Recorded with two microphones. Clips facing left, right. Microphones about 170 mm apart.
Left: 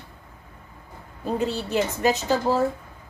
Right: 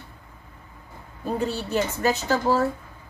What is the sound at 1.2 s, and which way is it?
A woman's voice, 15° left (ahead or behind).